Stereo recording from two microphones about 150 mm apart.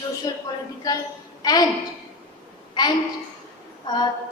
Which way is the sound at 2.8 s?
30° left (ahead or behind).